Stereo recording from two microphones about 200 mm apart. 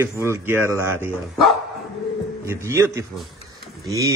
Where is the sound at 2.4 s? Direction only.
15° right (ahead or behind).